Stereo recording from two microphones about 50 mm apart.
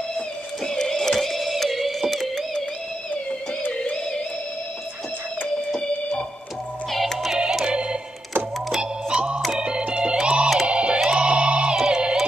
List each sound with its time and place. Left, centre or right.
0.7 s a sound: centre
6.9 s music: centre
7.2 s music: centre
9.1 s organ: centre
10.7 s music: right